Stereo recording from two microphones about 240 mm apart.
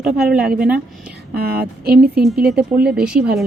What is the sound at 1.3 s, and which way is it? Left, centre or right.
Speech, right.